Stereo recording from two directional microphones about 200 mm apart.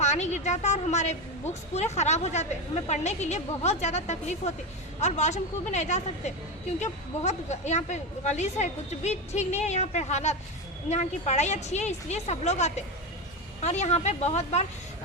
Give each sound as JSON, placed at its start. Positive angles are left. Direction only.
{"t": 0.0, "sound": "speech", "side_deg": 35}